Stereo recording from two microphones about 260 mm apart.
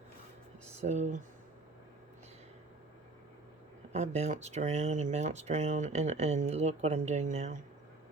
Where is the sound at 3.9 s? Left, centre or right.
Right.